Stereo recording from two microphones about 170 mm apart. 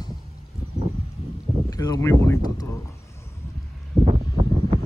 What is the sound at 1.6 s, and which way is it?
Speech, 20° left (ahead or behind).